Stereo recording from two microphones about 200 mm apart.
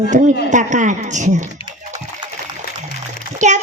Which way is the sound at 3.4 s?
35° right (ahead or behind).